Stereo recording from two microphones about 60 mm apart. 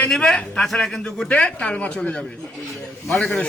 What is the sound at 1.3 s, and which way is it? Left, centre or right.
A man's voice, left.